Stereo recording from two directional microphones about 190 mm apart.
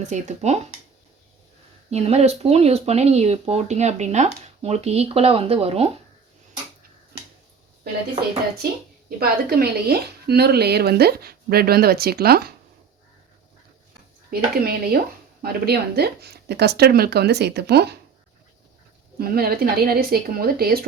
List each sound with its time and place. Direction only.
0.0 s speech: 40° right (ahead or behind)
1.9 s speech: 35° right (ahead or behind)
9.0 s speech: 55° right (ahead or behind)
14.3 s speech: 55° right (ahead or behind)
19.2 s speech: 50° right (ahead or behind)